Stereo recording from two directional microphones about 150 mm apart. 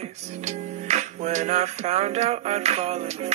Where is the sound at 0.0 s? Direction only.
50° right (ahead or behind).